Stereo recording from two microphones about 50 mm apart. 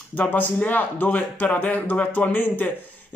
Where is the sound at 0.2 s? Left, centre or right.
Left.